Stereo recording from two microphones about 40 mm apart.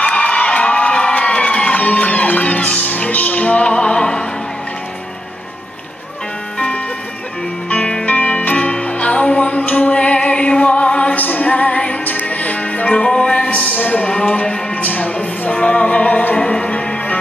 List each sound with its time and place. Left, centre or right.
0.0 s crowd: left
1.8 s music: left
7.7 s music: left
11.1 s music: left
11.5 s music: left
12.0 s music: left
13.6 s a sound: left
14.4 s music: left
14.8 s music: left
15.6 s music: left
16.7 s music: left